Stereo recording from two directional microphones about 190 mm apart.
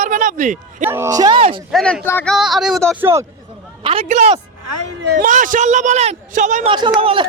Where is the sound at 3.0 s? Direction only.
15° right (ahead or behind).